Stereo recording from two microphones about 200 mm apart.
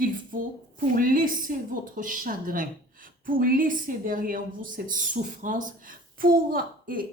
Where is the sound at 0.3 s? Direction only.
45° right (ahead or behind).